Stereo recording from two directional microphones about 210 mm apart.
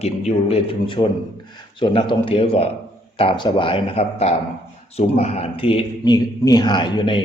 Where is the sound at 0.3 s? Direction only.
30° left (ahead or behind).